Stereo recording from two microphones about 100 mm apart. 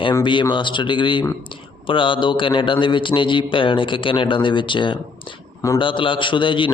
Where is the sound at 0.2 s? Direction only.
55° left (ahead or behind).